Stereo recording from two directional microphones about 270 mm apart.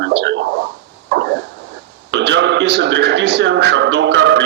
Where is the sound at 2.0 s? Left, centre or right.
Right.